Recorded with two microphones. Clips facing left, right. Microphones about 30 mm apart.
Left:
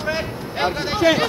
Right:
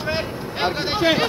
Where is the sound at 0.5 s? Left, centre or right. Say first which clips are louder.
Left 1 dB; centre.